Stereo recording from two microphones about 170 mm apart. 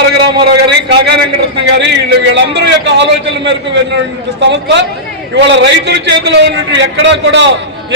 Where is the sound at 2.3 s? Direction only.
90° right.